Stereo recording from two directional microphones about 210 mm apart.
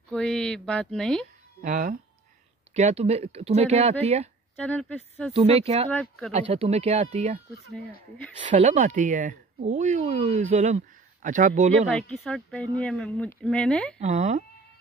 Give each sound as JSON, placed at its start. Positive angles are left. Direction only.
{"t": 0.1, "sound": "speech", "side_deg": 5}
{"t": 1.6, "sound": "speech", "side_deg": -40}
{"t": 4.6, "sound": "speech", "side_deg": 5}
{"t": 5.3, "sound": "speech", "side_deg": -30}
{"t": 5.9, "sound": "speech", "side_deg": 5}
{"t": 6.3, "sound": "speech", "side_deg": -30}
{"t": 8.4, "sound": "speech", "side_deg": -35}
{"t": 11.9, "sound": "speech", "side_deg": 5}
{"t": 13.9, "sound": "speech", "side_deg": -35}